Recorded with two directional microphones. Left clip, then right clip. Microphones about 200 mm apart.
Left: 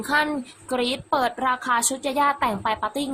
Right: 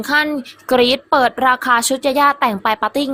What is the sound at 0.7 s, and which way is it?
A woman's voice, 30° right (ahead or behind).